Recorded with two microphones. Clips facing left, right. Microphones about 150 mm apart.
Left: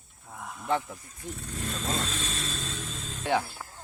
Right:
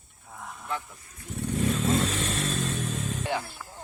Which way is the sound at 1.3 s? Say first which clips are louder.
Right 10 dB; 65° right (ahead or behind).